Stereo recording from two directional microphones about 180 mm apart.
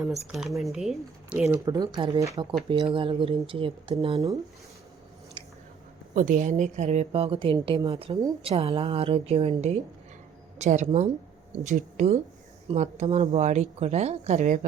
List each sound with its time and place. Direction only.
0.0 s speech: centre (ahead or behind)
1.5 s speech: 15° right (ahead or behind)
5.4 s chewing: 25° right (ahead or behind)
6.1 s a woman's voice: 45° right (ahead or behind)
10.8 s a woman's voice: 30° right (ahead or behind)
11.6 s a woman's voice: 40° right (ahead or behind)